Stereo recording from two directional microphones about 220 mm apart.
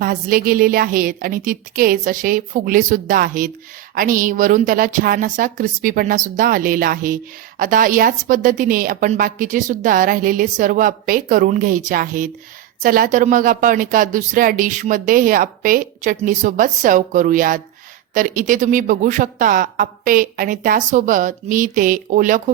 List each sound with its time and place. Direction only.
0.0 s speech: 40° right (ahead or behind)